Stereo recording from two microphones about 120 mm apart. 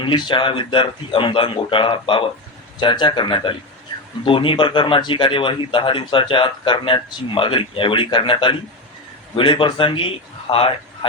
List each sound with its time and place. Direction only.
0.0 s a man's voice: 40° left (ahead or behind)